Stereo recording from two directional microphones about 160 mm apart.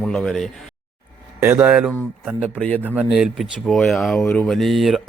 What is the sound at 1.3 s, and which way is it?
Speech, 15° right (ahead or behind).